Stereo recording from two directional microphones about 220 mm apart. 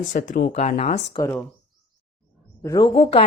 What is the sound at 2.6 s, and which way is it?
Speech, 20° left (ahead or behind).